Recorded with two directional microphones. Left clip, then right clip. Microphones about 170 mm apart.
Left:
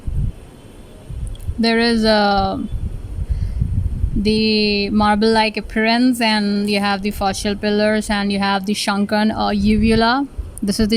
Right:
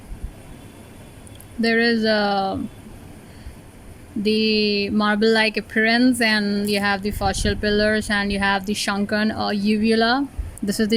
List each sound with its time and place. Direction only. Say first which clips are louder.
1.6 s speech: left 3 dB; 20° left (ahead or behind)
4.2 s speech: left 2 dB; 15° left (ahead or behind)